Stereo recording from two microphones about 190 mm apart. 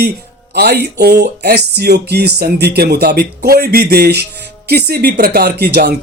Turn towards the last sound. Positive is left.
turn(degrees=-55)  # may be behind; listen again after turning